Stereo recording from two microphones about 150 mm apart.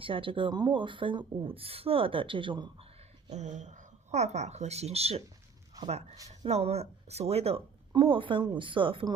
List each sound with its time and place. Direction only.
0.0 s speech: 35° right (ahead or behind)
3.2 s speech: 50° right (ahead or behind)